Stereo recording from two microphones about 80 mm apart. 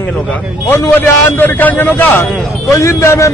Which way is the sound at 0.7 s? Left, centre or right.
Left.